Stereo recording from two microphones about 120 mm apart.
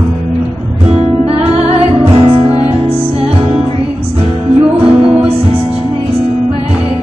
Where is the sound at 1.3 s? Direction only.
55° right (ahead or behind).